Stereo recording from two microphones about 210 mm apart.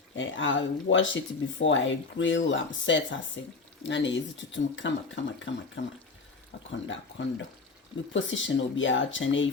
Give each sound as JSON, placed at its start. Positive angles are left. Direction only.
{"t": 0.2, "sound": "speech", "side_deg": 65}